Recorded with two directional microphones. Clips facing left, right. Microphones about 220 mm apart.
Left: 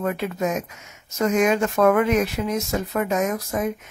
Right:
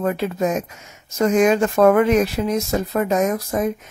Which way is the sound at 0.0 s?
35° right (ahead or behind).